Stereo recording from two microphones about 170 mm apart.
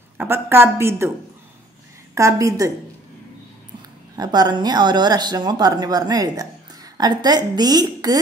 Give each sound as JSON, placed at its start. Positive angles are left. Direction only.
{"t": 0.2, "sound": "a woman's voice", "side_deg": -15}
{"t": 2.1, "sound": "speech", "side_deg": -20}
{"t": 4.2, "sound": "speech", "side_deg": -25}